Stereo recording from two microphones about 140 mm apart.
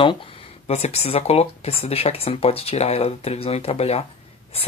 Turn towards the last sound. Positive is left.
turn(degrees=45)  # may be behind; listen again after turning